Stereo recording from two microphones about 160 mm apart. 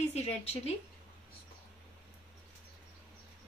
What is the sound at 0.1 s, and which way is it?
Speech, 40° left (ahead or behind).